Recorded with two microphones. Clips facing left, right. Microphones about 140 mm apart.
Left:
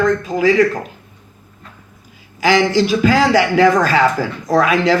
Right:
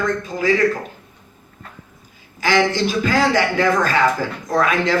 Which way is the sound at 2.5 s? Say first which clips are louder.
Left 3 dB; 45° right (ahead or behind).